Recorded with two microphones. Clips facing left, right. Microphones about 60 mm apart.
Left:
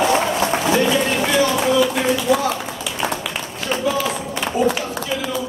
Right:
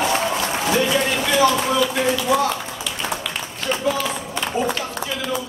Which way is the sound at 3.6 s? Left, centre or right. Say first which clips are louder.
Left 1 dB; centre.